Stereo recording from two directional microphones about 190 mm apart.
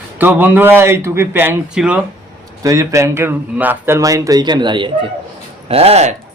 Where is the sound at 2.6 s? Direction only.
20° right (ahead or behind); by 6.2 s 35° right (ahead or behind).